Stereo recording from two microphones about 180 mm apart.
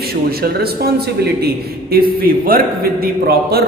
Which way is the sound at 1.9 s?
55° right (ahead or behind).